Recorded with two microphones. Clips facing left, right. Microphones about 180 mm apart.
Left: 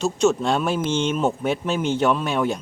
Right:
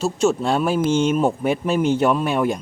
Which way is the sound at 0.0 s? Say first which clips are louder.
Even; 5° right (ahead or behind).